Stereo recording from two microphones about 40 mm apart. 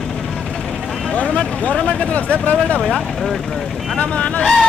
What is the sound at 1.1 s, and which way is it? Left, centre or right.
Vehicle, left.